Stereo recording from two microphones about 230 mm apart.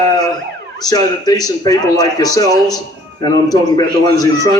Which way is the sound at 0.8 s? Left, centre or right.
Centre.